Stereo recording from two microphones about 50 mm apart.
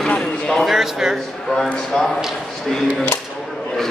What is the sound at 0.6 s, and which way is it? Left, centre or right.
Speech, centre.